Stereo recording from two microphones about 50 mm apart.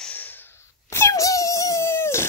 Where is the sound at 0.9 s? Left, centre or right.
Left.